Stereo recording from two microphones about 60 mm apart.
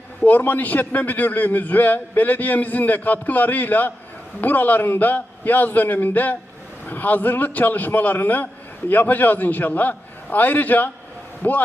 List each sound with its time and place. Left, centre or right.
0.2 s a man's voice: left